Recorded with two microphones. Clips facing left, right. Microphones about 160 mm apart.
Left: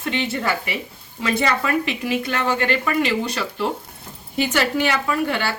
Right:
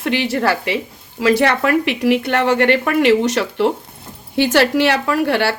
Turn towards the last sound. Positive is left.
turn(degrees=-75)  # may be behind; listen again after turning